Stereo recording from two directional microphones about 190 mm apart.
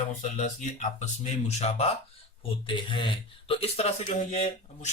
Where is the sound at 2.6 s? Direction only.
25° left (ahead or behind).